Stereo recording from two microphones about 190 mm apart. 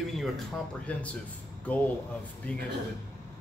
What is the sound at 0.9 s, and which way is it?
Speech, 5° left (ahead or behind).